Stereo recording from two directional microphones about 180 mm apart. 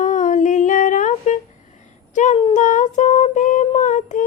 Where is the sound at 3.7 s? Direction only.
40° left (ahead or behind).